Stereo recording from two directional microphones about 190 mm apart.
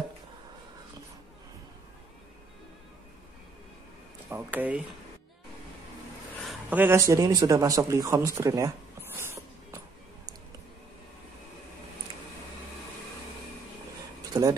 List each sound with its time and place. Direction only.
4.3 s speech: 10° right (ahead or behind)
6.4 s speech: 5° right (ahead or behind)
14.3 s speech: 15° right (ahead or behind)